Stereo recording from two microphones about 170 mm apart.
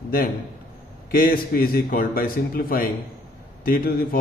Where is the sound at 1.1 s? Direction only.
60° left (ahead or behind).